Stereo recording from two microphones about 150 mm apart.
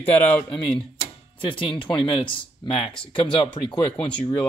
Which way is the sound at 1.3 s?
35° left (ahead or behind).